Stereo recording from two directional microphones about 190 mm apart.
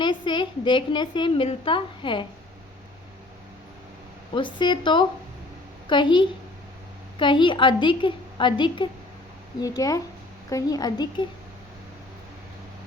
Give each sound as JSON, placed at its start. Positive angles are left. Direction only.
{"t": 0.0, "sound": "a woman's voice", "side_deg": 25}
{"t": 4.4, "sound": "a woman's voice", "side_deg": 25}